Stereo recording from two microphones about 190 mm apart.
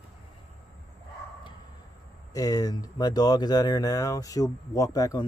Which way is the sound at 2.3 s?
20° left (ahead or behind).